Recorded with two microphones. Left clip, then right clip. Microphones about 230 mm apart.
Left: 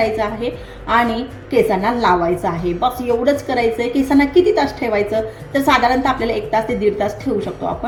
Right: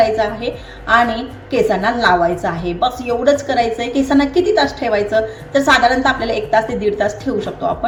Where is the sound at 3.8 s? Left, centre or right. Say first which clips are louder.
Even; centre.